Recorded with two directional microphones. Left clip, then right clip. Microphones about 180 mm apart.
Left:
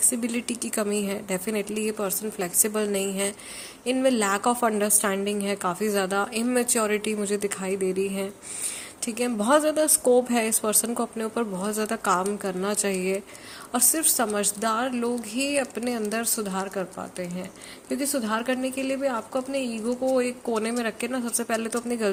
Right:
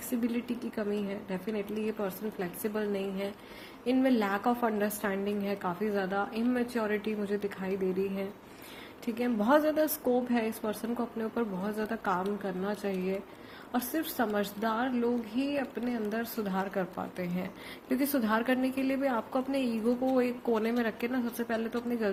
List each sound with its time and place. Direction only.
0.1 s a woman's voice: 30° left (ahead or behind)
16.5 s a woman's voice: 15° left (ahead or behind)